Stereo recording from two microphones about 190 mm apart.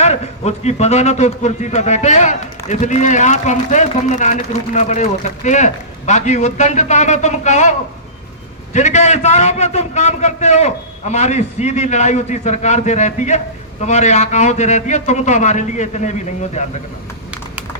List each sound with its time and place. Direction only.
0.0 s a man's voice: 35° left (ahead or behind)
8.7 s a man's voice: 40° left (ahead or behind)